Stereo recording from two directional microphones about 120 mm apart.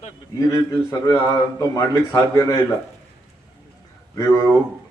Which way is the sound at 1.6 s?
25° left (ahead or behind).